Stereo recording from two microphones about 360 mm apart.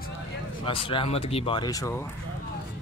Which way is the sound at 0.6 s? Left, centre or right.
Centre.